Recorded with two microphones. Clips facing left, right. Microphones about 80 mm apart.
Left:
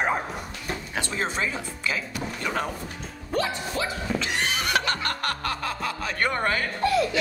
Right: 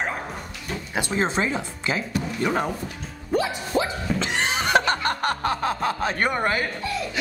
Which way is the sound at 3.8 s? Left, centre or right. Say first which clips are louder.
Right 5 dB; right.